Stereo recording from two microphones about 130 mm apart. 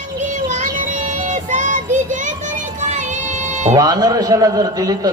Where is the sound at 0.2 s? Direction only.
70° right (ahead or behind).